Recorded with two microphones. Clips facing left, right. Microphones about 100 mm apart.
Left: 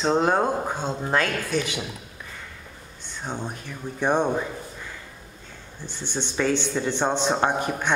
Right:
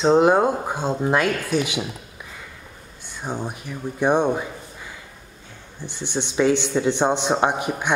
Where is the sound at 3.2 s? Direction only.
10° right (ahead or behind).